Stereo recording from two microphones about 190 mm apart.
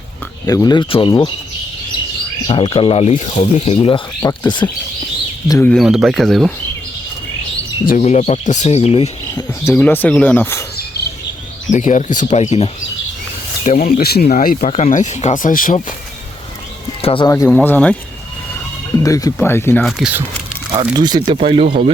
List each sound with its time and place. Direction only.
0.4 s speech: 20° left (ahead or behind)
2.5 s speech: 25° left (ahead or behind)
5.7 s speech: centre (ahead or behind)
7.9 s speech: 40° left (ahead or behind)
9.6 s speech: 10° left (ahead or behind)
11.7 s speech: 40° left (ahead or behind)
13.7 s speech: 45° left (ahead or behind)
17.0 s speech: 30° left (ahead or behind)
17.2 s speech: 15° left (ahead or behind)
19.0 s speech: 15° left (ahead or behind)
19.8 s speech: 5° right (ahead or behind)
20.9 s speech: 20° right (ahead or behind)